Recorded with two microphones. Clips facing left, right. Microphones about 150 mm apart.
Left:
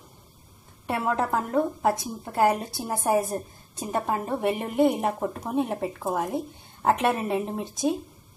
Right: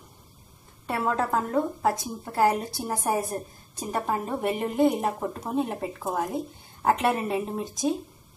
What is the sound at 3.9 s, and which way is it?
A woman's voice, 15° left (ahead or behind).